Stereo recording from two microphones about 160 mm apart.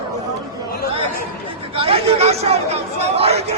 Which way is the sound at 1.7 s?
35° right (ahead or behind).